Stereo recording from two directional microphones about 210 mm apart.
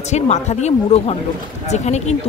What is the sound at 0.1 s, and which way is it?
Speech, 35° left (ahead or behind).